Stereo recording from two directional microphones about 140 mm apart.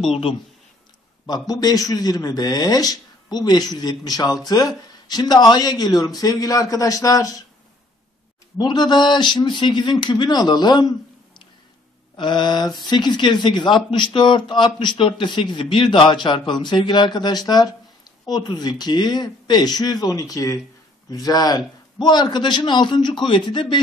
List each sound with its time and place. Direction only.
0.1 s speech: 40° left (ahead or behind)
1.5 s speech: 25° left (ahead or behind)
8.5 s speech: 30° left (ahead or behind)
12.2 s speech: 35° left (ahead or behind)